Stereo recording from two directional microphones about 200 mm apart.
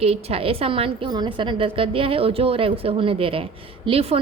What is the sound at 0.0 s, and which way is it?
A woman's voice, 30° right (ahead or behind).